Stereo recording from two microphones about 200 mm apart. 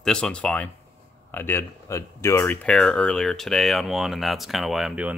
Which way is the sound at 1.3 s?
10° left (ahead or behind).